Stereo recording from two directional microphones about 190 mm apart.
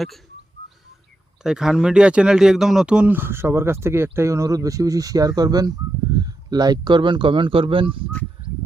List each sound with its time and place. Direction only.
1.5 s speech: centre (ahead or behind); by 8.0 s 25° right (ahead or behind)